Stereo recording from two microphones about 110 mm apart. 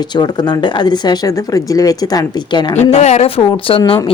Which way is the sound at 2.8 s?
90° left.